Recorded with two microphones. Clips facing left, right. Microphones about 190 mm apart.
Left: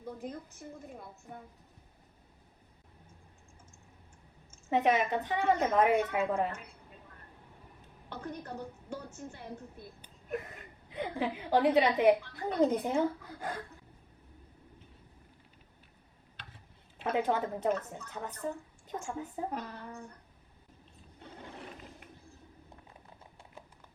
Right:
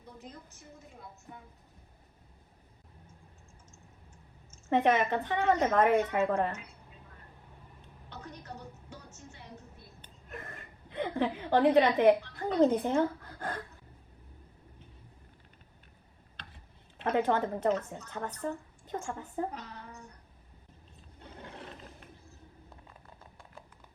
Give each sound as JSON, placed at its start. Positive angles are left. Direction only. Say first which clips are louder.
{"t": 0.2, "sound": "speech", "louder": "left 7 dB", "side_deg": 55}
{"t": 4.7, "sound": "a woman's voice", "louder": "right 2 dB", "side_deg": 5}
{"t": 8.1, "sound": "a woman's voice", "louder": "left 5 dB", "side_deg": 55}
{"t": 10.0, "sound": "a sound", "louder": "left 8 dB", "side_deg": 5}
{"t": 12.7, "sound": "speech", "louder": "right 2 dB", "side_deg": 10}
{"t": 17.0, "sound": "a woman's voice", "louder": "right 2 dB", "side_deg": 5}
{"t": 19.5, "sound": "speech", "louder": "left 4 dB", "side_deg": 55}